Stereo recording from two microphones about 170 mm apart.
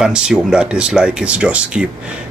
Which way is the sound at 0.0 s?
5° right (ahead or behind).